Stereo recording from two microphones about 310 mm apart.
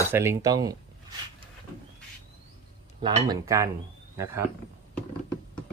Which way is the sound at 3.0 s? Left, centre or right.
Centre.